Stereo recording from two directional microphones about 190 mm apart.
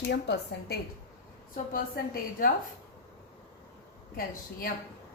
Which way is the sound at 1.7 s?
50° left (ahead or behind).